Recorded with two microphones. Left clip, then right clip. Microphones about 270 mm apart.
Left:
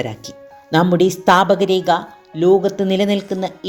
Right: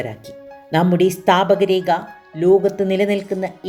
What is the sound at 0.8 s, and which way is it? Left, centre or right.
A woman's voice, centre.